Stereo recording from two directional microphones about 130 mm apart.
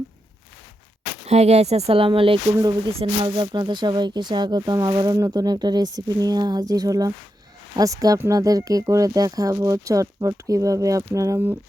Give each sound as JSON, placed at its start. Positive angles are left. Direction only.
{"t": 1.3, "sound": "speech", "side_deg": -55}
{"t": 2.6, "sound": "speech", "side_deg": -30}